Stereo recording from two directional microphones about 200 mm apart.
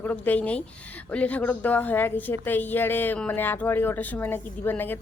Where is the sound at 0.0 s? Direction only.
10° left (ahead or behind).